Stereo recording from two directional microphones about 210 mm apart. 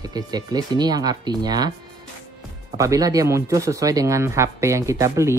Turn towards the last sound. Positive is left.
turn(degrees=-15)  # may be behind; listen again after turning